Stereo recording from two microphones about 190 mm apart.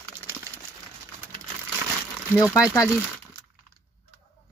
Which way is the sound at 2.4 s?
15° left (ahead or behind).